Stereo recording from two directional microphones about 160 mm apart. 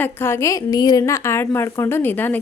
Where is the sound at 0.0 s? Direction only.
15° left (ahead or behind).